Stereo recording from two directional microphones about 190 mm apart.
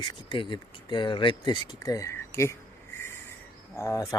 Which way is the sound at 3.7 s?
15° left (ahead or behind).